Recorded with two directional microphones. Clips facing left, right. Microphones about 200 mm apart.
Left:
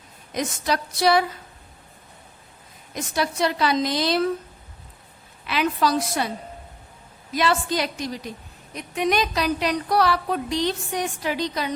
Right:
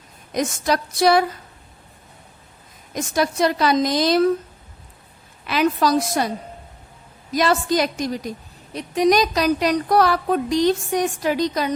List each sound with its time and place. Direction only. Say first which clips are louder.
0.3 s a woman's voice: right 4 dB; 45° right (ahead or behind)
2.9 s a woman's voice: right 4 dB; 45° right (ahead or behind)
5.5 s a woman's voice: right 4 dB; 40° right (ahead or behind)
7.3 s a woman's voice: right 4 dB; 45° right (ahead or behind)
8.7 s a woman's voice: right 6 dB; 35° right (ahead or behind)